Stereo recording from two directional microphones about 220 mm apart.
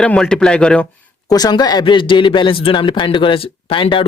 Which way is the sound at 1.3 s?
20° left (ahead or behind).